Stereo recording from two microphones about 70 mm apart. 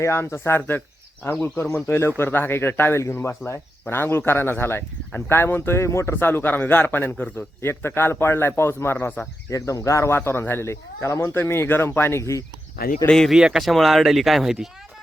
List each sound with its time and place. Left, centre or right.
0.0 s speech: left
6.1 s a man's voice: left
9.5 s speech: left
12.2 s speech: left
13.1 s speech: centre
13.3 s speech: centre